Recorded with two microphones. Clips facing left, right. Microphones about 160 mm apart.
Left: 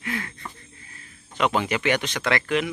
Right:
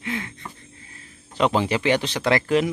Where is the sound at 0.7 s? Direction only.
25° right (ahead or behind).